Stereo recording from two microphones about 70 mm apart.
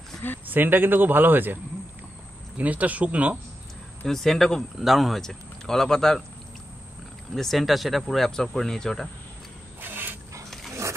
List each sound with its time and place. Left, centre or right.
0.5 s a man's voice: right
4.0 s speech: centre
7.3 s speech: centre
9.8 s a sound: right
10.7 s dog: right